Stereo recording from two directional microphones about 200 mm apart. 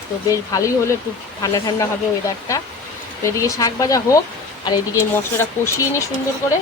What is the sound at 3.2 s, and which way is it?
Speech, 15° left (ahead or behind).